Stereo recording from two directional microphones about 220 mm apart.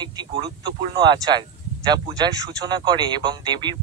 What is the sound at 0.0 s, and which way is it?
Speech, 20° right (ahead or behind).